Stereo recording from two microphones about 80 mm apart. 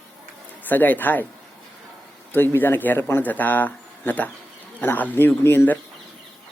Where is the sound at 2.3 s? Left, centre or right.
Left.